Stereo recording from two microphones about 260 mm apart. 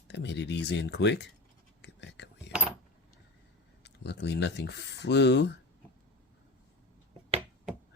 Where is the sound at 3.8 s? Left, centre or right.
Left.